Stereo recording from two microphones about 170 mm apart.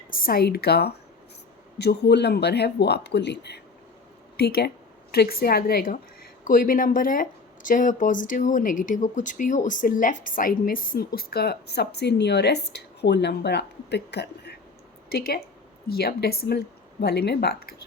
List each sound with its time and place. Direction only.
0.1 s speech: 55° left (ahead or behind); by 3.6 s 80° left
4.4 s a woman's voice: 65° left (ahead or behind); by 14.5 s 80° left
15.1 s a woman's voice: 65° left (ahead or behind)